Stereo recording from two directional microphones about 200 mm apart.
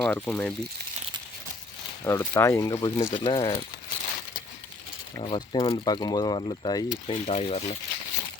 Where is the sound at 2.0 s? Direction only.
15° left (ahead or behind).